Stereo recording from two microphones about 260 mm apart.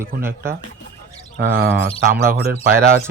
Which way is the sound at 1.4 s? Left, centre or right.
Right.